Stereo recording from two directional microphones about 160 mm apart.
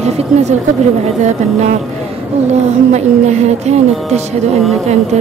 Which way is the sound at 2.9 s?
45° right (ahead or behind).